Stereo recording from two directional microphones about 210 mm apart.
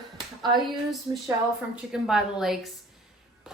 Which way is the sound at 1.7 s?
5° right (ahead or behind).